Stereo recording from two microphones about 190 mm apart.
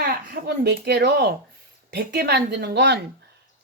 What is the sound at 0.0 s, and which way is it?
Speech, 60° right (ahead or behind).